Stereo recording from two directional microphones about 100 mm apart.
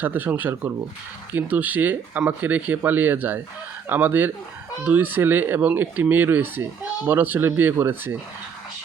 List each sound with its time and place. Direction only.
0.0 s speech: 20° right (ahead or behind)